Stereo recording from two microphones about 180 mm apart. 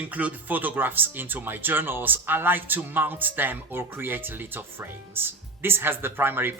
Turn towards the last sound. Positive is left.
turn(degrees=-10)  # may be behind; listen again after turning